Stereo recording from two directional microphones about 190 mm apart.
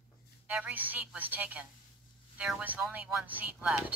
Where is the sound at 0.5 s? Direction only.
5° right (ahead or behind).